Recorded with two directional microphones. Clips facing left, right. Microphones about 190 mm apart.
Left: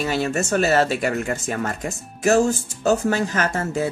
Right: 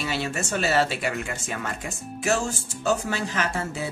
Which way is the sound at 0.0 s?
45° left (ahead or behind).